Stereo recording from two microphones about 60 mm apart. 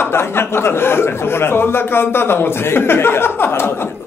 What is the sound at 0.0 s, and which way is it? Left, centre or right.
Speech, left.